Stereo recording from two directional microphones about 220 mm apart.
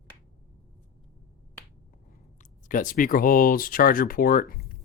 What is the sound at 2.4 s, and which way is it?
Speech, 35° left (ahead or behind).